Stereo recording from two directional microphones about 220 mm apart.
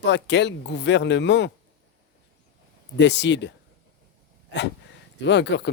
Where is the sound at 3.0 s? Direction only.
50° left (ahead or behind).